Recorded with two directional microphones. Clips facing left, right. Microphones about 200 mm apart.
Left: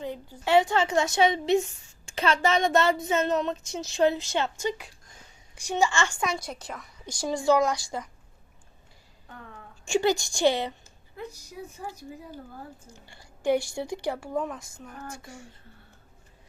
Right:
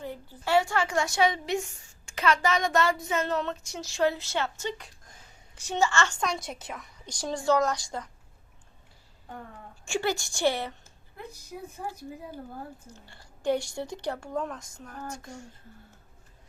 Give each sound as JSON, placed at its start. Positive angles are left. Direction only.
{"t": 0.0, "sound": "a woman's voice", "side_deg": 15}
{"t": 7.0, "sound": "a woman's voice", "side_deg": 10}
{"t": 9.8, "sound": "a woman's voice", "side_deg": 20}
{"t": 11.2, "sound": "a sound", "side_deg": -55}
{"t": 12.9, "sound": "a woman's voice", "side_deg": 10}